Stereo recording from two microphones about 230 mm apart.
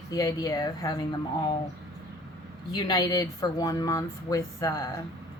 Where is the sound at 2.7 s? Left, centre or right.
Centre.